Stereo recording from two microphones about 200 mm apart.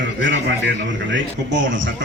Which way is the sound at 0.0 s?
65° right (ahead or behind).